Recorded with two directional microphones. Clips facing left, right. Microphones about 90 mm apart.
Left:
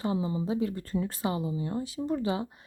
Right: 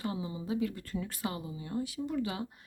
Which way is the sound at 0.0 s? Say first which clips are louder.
Left 7 dB; 30° left (ahead or behind).